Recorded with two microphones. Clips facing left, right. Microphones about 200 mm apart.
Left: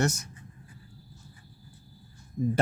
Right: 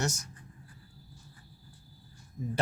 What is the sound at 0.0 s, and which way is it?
Speech, 60° left (ahead or behind).